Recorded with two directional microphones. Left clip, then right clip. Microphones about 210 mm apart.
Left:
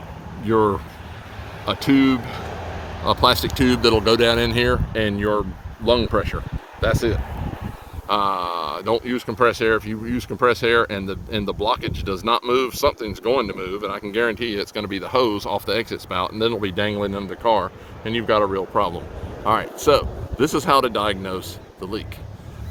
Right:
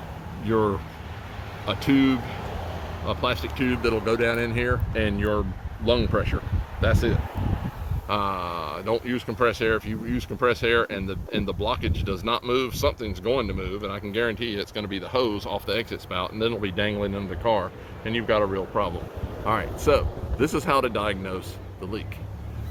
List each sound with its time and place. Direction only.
0.4 s speech: 45° left (ahead or behind)